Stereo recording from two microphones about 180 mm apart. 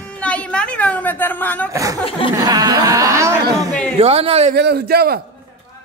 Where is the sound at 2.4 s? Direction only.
20° right (ahead or behind).